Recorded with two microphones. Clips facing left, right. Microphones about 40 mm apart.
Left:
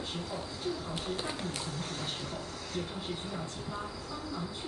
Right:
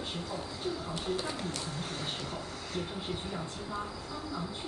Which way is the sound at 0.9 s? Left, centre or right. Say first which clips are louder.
Right 2 dB; centre.